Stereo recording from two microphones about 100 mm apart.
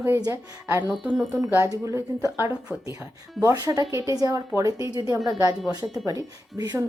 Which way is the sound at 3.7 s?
35° right (ahead or behind).